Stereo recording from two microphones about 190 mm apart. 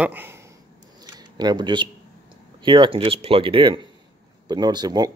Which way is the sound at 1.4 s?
25° right (ahead or behind).